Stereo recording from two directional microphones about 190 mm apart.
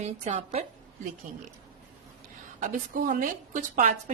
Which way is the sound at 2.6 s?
45° right (ahead or behind).